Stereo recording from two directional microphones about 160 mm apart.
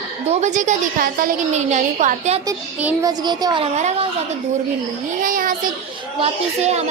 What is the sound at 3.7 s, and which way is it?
Speech, 40° right (ahead or behind).